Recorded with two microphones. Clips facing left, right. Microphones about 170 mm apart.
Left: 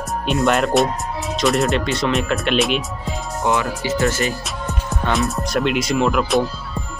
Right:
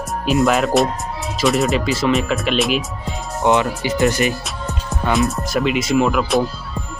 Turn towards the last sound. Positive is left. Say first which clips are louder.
# right 1 dB
turn(degrees=0)  # may be behind; listen again after turning